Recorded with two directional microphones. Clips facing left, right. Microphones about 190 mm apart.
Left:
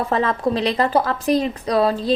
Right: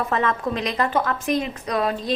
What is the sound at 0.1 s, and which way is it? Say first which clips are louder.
A woman's voice: left 3 dB; 30° left (ahead or behind).